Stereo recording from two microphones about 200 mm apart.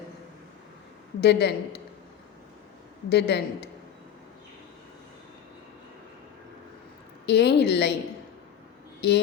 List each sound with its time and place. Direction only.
1.2 s a woman's voice: 55° left (ahead or behind)
3.1 s a woman's voice: 55° left (ahead or behind)
7.3 s a woman's voice: 55° left (ahead or behind)
9.0 s a woman's voice: 55° left (ahead or behind)